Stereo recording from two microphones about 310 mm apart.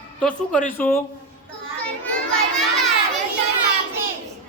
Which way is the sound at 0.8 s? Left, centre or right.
Centre.